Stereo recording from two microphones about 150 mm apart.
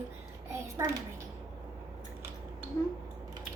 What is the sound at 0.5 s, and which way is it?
Speech, 20° right (ahead or behind).